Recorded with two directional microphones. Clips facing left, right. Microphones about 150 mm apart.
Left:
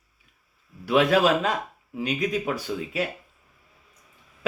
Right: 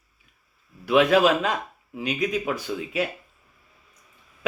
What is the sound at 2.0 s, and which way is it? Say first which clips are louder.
Speech: even; 40° left (ahead or behind).